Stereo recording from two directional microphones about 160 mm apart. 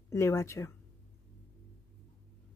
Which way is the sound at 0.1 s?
20° left (ahead or behind).